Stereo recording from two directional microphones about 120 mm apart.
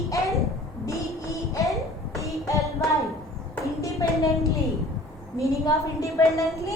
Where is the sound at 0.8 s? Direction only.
25° left (ahead or behind).